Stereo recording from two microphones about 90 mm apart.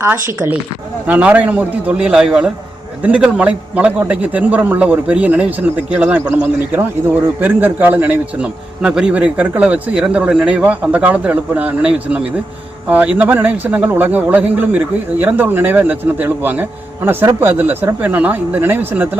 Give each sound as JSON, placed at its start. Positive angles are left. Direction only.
{"t": 1.0, "sound": "a man's voice", "side_deg": -15}